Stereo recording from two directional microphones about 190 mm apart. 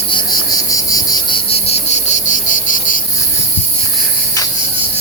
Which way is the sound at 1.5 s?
35° left (ahead or behind).